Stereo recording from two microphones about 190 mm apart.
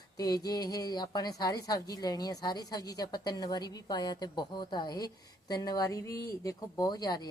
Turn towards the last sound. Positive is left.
turn(degrees=20)  # may be behind; listen again after turning